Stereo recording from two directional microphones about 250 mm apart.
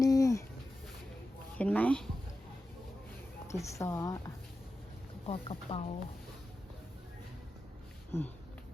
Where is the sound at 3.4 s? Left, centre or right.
Centre.